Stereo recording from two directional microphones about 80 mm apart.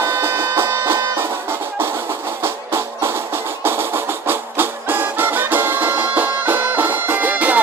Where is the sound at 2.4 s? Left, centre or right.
Right.